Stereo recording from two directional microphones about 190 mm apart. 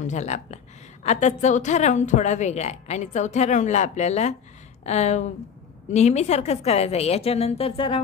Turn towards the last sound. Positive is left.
turn(degrees=30)  # may be behind; listen again after turning